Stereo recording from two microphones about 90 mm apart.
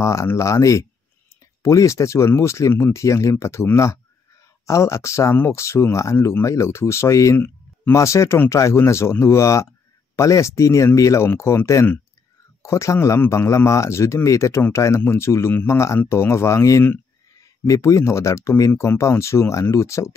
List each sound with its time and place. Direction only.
0.0 s speech: 35° left (ahead or behind)
7.3 s a sound: 20° left (ahead or behind)
7.9 s speech: 35° left (ahead or behind)